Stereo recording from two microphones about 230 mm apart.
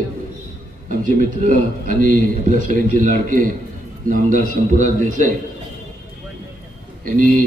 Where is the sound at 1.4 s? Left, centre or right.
Right.